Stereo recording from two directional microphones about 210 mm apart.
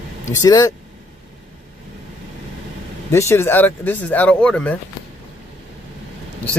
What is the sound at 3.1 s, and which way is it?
Speech, 10° left (ahead or behind).